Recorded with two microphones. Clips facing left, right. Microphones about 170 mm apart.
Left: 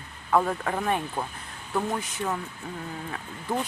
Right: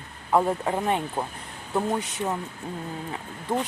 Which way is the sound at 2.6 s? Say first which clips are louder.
Right 3 dB; 35° right (ahead or behind).